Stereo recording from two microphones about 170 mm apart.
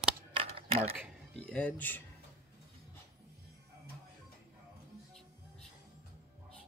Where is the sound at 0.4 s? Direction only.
35° right (ahead or behind).